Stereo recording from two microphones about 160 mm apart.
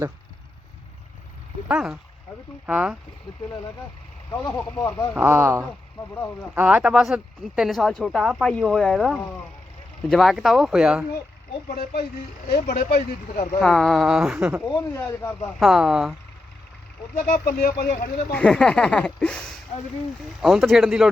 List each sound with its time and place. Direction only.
1.6 s speech: 5° right (ahead or behind)
4.3 s speech: 10° left (ahead or behind)
5.1 s speech: 10° right (ahead or behind)
11.7 s speech: 65° left (ahead or behind)
13.6 s speech: 5° left (ahead or behind)
14.7 s speech: 15° left (ahead or behind)
15.4 s speech: centre (ahead or behind)
17.2 s speech: 65° left (ahead or behind)
18.3 s speech: 5° left (ahead or behind)